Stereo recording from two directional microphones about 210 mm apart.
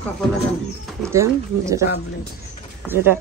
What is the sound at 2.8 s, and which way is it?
Speech, 10° right (ahead or behind).